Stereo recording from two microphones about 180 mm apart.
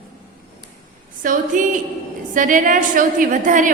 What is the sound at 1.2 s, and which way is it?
A woman's voice, 45° right (ahead or behind).